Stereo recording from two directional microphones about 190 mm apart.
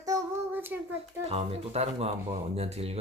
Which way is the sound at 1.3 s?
30° right (ahead or behind).